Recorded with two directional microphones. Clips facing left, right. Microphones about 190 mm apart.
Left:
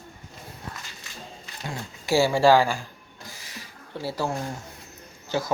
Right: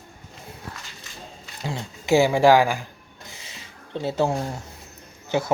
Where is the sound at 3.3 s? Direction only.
25° right (ahead or behind).